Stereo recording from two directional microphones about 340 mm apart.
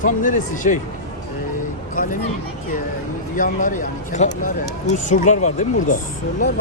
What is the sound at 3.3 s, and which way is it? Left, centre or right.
Speech, left.